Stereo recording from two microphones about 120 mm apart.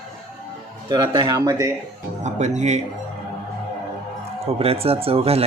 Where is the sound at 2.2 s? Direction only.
75° right (ahead or behind).